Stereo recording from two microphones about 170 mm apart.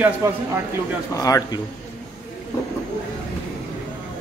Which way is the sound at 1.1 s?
20° left (ahead or behind).